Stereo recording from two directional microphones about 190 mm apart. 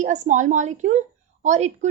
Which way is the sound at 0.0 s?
40° right (ahead or behind).